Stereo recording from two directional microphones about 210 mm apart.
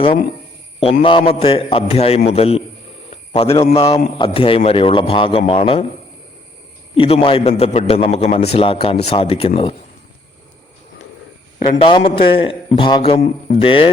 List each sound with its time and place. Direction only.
1.0 s a man's voice: 25° left (ahead or behind)
3.1 s a sound: 30° left (ahead or behind)
3.7 s a man's voice: 30° left (ahead or behind)
6.9 s a man's voice: 25° left (ahead or behind)
11.7 s a man's voice: 25° left (ahead or behind)